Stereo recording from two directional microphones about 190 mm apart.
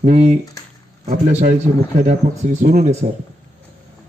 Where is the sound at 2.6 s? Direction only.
50° right (ahead or behind).